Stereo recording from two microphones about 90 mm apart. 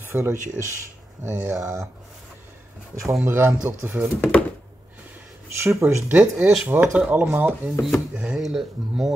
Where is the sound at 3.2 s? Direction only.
25° right (ahead or behind).